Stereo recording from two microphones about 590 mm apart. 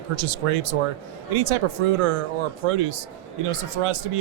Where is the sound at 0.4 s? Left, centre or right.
Right.